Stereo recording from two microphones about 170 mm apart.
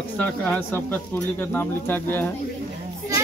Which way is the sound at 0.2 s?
5° left (ahead or behind).